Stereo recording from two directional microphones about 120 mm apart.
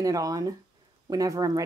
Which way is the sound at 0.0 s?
30° right (ahead or behind).